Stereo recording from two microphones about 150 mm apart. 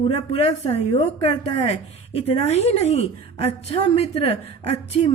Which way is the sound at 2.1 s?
45° left (ahead or behind).